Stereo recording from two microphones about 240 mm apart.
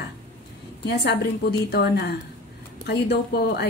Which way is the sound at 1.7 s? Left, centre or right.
Left.